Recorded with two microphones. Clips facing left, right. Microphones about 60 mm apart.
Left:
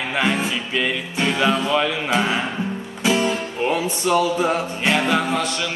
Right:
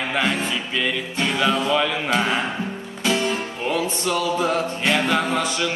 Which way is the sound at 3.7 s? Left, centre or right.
Centre.